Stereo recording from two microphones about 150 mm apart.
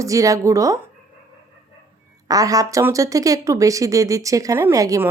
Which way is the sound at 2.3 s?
25° right (ahead or behind).